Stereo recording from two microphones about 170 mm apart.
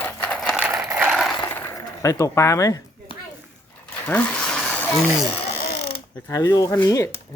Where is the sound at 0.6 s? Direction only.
10° right (ahead or behind).